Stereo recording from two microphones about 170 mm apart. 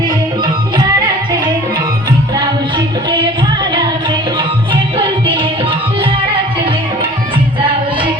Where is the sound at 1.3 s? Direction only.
25° right (ahead or behind).